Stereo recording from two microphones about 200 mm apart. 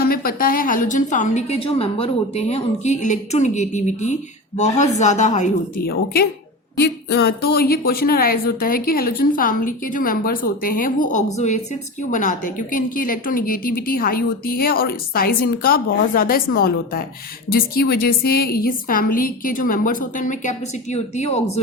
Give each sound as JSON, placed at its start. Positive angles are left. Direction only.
{"t": 0.0, "sound": "a woman's voice", "side_deg": 50}